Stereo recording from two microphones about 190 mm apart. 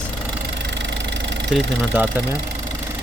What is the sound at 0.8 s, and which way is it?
Engine, 70° right (ahead or behind).